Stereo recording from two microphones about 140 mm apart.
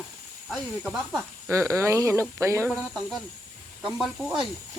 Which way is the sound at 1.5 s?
20° right (ahead or behind).